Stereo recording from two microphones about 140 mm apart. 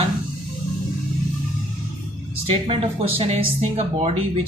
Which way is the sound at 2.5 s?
40° right (ahead or behind).